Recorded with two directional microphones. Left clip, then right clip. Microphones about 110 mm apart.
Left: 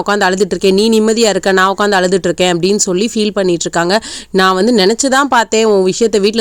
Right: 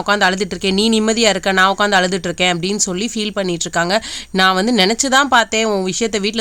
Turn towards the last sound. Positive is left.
turn(degrees=50)  # may be behind; listen again after turning